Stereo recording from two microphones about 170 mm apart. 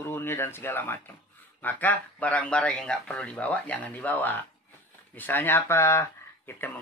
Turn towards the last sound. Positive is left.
turn(degrees=10)  # may be behind; listen again after turning